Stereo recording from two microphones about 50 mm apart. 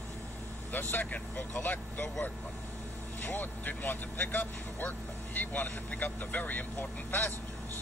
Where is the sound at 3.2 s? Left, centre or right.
Left.